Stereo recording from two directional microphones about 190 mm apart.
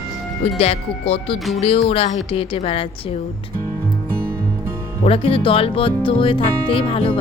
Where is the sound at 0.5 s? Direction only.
30° left (ahead or behind).